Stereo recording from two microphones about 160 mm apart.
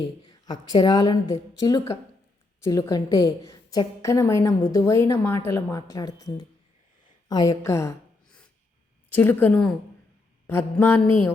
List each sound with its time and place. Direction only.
0.4 s a woman's voice: 25° left (ahead or behind)
9.0 s mantra: 10° left (ahead or behind)